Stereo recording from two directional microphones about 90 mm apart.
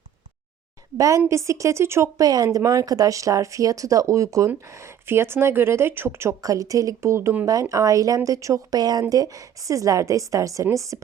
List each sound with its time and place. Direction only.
0.9 s speech: 40° right (ahead or behind)